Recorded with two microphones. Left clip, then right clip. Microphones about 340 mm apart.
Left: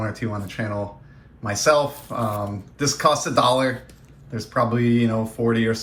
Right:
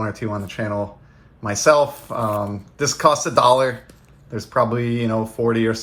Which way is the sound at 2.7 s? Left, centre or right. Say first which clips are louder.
Right 3 dB; centre.